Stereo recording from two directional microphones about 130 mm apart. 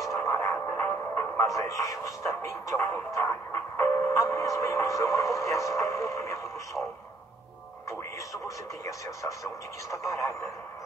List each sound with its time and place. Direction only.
0.1 s speech: 20° left (ahead or behind)
8.8 s speech: 25° left (ahead or behind)